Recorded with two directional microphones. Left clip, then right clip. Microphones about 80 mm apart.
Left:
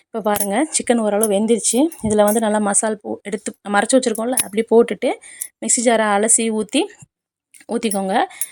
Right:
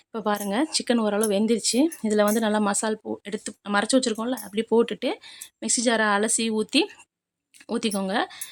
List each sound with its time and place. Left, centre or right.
0.1 s a woman's voice: left
0.9 s a woman's voice: left
3.2 s a woman's voice: left